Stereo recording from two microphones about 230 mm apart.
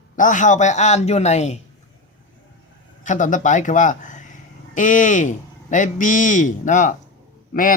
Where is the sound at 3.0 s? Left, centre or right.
Left.